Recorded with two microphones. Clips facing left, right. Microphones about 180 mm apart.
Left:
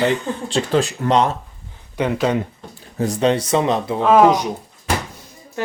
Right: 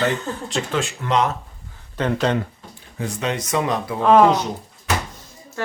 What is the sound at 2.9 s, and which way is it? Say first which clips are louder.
Speech: left 8 dB; 35° left (ahead or behind).